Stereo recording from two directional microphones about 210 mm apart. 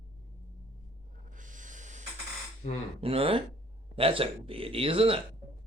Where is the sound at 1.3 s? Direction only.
35° right (ahead or behind).